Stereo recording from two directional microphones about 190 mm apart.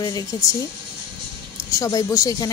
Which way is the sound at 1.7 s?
15° left (ahead or behind).